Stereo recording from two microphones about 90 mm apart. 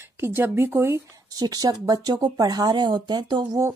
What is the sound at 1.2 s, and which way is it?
Speech, 45° right (ahead or behind).